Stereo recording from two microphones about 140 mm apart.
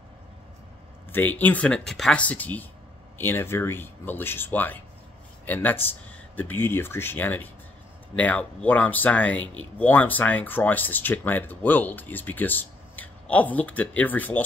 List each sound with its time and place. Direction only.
1.1 s speech: 15° left (ahead or behind)